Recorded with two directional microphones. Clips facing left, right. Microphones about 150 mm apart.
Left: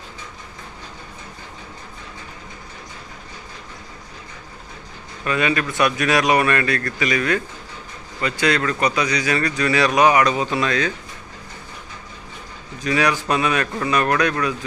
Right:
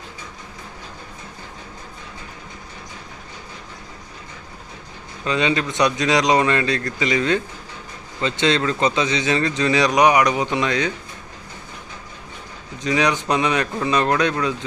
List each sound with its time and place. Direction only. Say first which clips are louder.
5.2 s a man's voice: even; 20° right (ahead or behind)
12.8 s a man's voice: even; 20° right (ahead or behind)